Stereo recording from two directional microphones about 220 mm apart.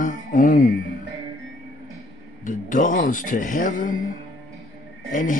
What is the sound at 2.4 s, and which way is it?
Speech, 40° left (ahead or behind).